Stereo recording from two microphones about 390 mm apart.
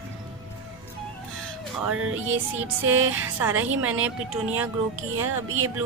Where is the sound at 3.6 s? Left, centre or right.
Right.